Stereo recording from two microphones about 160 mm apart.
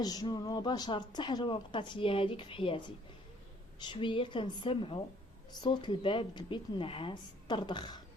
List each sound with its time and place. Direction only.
0.0 s a woman's voice: 25° left (ahead or behind)